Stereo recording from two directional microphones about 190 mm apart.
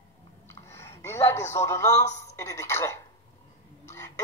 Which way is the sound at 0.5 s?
15° left (ahead or behind).